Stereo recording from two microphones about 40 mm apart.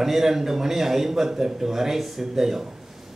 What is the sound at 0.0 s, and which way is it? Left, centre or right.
Speech, centre.